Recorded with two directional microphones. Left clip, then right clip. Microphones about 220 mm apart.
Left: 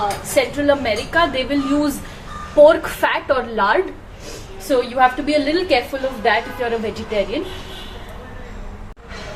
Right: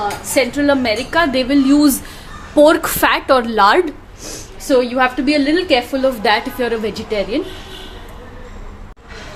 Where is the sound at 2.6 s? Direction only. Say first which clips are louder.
Right 1 dB; 55° right (ahead or behind).